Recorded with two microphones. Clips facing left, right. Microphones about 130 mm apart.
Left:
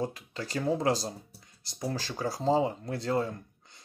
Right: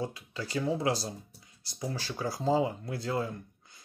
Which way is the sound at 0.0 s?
40° left (ahead or behind).